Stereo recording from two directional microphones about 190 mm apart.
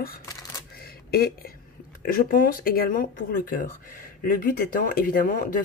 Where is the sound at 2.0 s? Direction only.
50° left (ahead or behind).